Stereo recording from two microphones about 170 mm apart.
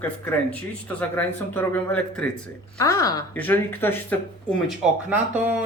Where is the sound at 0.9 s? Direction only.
10° left (ahead or behind).